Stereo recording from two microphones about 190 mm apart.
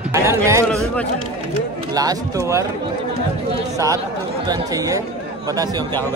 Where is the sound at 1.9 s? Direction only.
20° right (ahead or behind).